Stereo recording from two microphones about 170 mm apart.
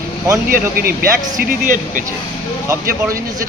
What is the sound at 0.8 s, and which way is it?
Speech, 60° right (ahead or behind).